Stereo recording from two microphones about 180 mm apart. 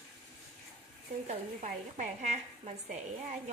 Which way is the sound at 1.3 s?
40° right (ahead or behind).